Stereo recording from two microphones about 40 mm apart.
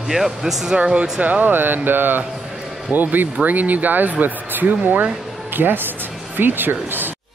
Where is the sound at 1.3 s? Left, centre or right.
Right.